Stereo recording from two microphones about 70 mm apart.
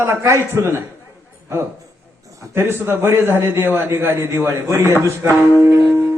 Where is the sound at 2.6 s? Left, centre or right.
Right.